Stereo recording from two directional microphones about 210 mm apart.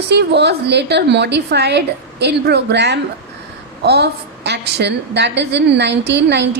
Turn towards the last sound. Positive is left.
turn(degrees=-55)  # may be behind; listen again after turning